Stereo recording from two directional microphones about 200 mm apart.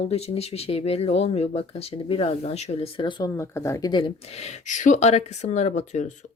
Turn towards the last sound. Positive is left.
turn(degrees=35)  # may be behind; listen again after turning